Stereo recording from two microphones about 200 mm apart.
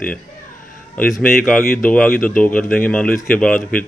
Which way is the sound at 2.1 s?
45° left (ahead or behind).